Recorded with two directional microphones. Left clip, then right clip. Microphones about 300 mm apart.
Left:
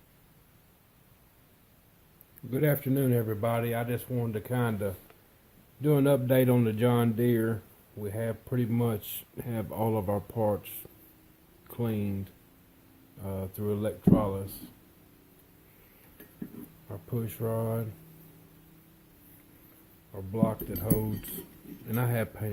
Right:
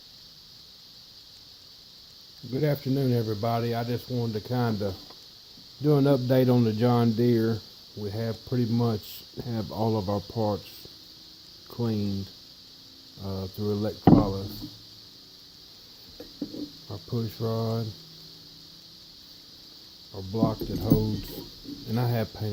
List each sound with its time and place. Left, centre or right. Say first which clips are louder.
2.5 s speech: right 1 dB; centre
11.7 s speech: right 3 dB; centre
13.2 s speech: right 2 dB; centre
16.9 s speech: right 1 dB; centre
20.3 s speech: right 3 dB; centre